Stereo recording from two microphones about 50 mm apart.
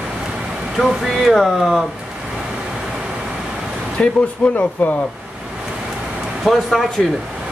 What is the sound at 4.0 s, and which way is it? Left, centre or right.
Speech, left.